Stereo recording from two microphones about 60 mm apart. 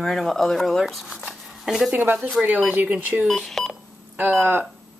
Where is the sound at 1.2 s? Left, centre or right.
Centre.